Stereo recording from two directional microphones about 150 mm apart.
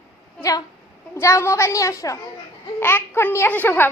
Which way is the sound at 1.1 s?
20° left (ahead or behind).